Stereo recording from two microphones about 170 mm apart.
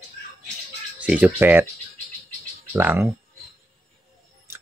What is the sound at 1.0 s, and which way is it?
Speech, 5° right (ahead or behind).